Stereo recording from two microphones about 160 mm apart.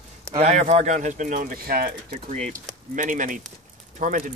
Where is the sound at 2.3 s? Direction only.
50° right (ahead or behind).